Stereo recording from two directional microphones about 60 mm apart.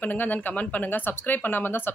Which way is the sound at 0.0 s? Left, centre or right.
Left.